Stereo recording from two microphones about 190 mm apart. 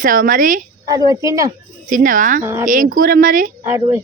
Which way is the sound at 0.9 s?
20° right (ahead or behind).